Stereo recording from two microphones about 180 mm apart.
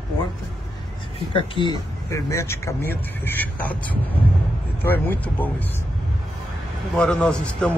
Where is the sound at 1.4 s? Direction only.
25° left (ahead or behind).